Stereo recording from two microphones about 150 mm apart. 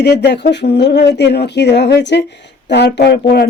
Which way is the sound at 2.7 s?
90° left.